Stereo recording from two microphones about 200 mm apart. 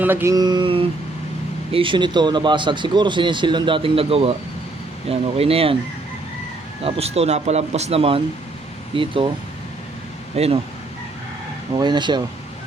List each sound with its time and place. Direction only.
0.0 s speech: 10° right (ahead or behind); by 5.7 s 30° right (ahead or behind)
6.8 s speech: 30° right (ahead or behind)
10.3 s speech: 30° right (ahead or behind)
11.8 s speech: 20° right (ahead or behind)